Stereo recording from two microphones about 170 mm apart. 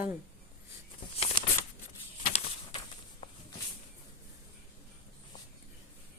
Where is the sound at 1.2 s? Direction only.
35° left (ahead or behind).